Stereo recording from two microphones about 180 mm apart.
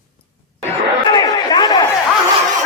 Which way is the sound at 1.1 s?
25° left (ahead or behind).